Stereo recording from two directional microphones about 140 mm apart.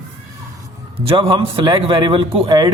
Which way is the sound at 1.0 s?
40° right (ahead or behind).